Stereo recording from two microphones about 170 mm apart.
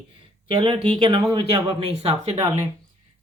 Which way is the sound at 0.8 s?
30° right (ahead or behind).